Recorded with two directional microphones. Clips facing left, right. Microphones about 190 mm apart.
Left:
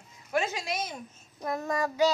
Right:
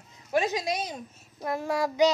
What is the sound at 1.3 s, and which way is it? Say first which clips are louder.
Child singing: right 2 dB; 5° right (ahead or behind).